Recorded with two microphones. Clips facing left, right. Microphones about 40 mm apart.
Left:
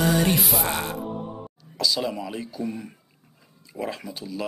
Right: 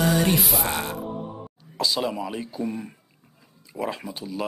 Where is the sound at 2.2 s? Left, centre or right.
Centre.